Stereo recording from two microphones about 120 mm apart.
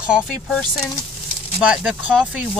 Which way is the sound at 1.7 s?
10° right (ahead or behind).